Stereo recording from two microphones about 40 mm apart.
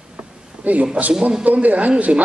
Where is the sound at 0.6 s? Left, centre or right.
Right.